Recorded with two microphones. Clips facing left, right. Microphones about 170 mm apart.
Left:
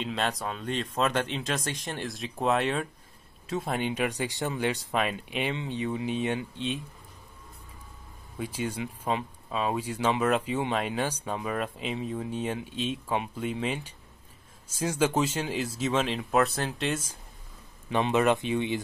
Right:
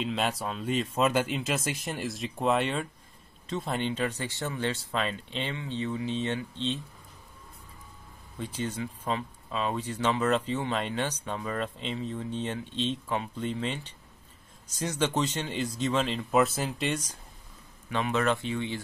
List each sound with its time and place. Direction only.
0.0 s speech: 5° right (ahead or behind)
8.4 s speech: 10° left (ahead or behind)
17.8 s speech: 20° left (ahead or behind)